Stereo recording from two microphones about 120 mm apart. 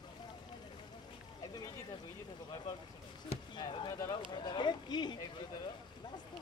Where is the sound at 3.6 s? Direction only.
40° left (ahead or behind).